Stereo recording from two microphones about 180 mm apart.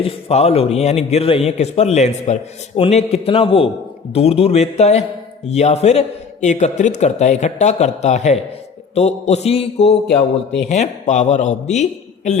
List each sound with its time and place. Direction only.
0.0 s a man's voice: 35° left (ahead or behind)